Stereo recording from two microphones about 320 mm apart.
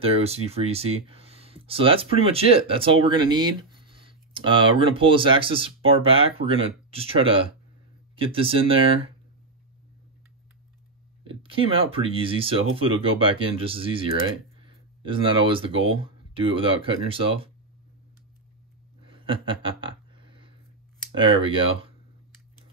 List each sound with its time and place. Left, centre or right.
0.0 s speech: centre
11.2 s speech: centre
19.1 s a sound: centre
21.1 s speech: centre